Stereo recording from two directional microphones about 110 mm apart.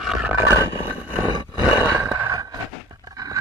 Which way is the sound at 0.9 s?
15° right (ahead or behind).